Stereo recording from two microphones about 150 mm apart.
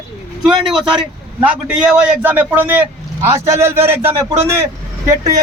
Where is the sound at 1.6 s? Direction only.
5° right (ahead or behind).